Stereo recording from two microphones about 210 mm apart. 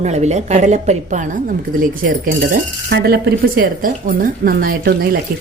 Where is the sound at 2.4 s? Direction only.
45° right (ahead or behind).